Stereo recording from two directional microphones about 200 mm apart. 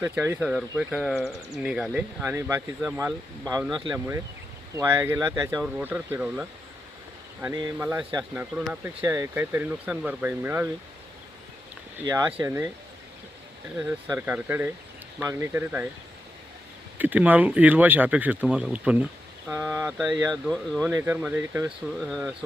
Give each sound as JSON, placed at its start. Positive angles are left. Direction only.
{"t": 0.0, "sound": "speech", "side_deg": -10}
{"t": 1.3, "sound": "speech", "side_deg": -15}
{"t": 1.6, "sound": "speech", "side_deg": -5}
{"t": 12.5, "sound": "speech", "side_deg": -15}
{"t": 13.7, "sound": "speech", "side_deg": -5}
{"t": 17.0, "sound": "speech", "side_deg": -10}
{"t": 20.9, "sound": "speech", "side_deg": -10}